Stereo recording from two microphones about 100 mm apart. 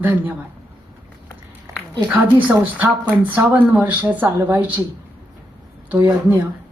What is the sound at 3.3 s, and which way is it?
Speech, 20° right (ahead or behind).